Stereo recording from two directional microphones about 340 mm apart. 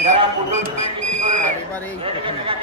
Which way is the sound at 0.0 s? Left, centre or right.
Right.